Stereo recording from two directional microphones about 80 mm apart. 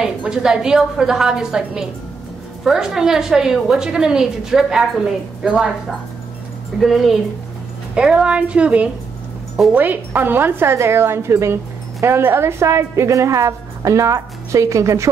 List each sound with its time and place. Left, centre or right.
0.0 s a woman's voice: centre
6.8 s a woman's voice: centre
7.9 s a woman's voice: centre; by 15.0 s right